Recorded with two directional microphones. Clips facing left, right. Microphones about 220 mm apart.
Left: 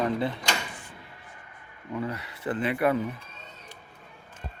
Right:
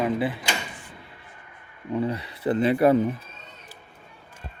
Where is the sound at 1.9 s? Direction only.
30° right (ahead or behind).